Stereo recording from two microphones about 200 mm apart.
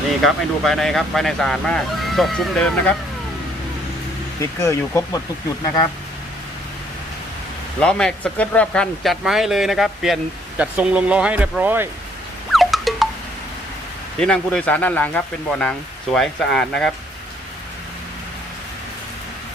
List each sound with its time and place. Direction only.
0.3 s speech: centre (ahead or behind)
4.4 s speech: 15° left (ahead or behind)
7.8 s speech: 5° left (ahead or behind)
12.5 s music: centre (ahead or behind)
14.2 s speech: 5° left (ahead or behind)